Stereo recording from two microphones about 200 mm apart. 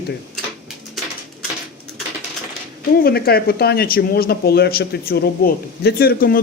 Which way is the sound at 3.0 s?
50° left (ahead or behind).